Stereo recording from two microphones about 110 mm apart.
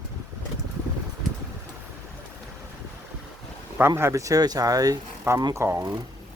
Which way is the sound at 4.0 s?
25° right (ahead or behind).